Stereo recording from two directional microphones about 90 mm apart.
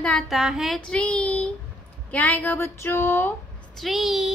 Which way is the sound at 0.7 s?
10° left (ahead or behind).